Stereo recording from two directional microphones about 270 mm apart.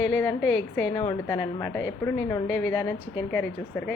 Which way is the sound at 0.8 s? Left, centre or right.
Centre.